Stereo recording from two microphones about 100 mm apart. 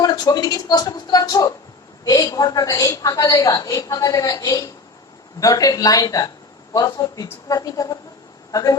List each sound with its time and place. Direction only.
0.0 s speech: 40° left (ahead or behind)